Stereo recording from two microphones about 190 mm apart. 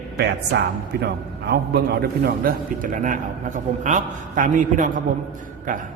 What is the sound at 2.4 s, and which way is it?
A man's voice, 45° right (ahead or behind).